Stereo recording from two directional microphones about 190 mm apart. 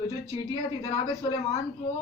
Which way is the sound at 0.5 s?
25° left (ahead or behind).